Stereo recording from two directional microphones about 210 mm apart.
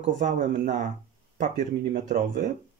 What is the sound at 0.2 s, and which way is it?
Speech, 35° right (ahead or behind).